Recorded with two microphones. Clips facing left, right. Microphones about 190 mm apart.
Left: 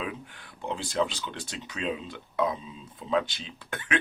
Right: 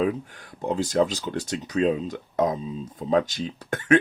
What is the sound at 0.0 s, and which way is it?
Speech, 40° right (ahead or behind).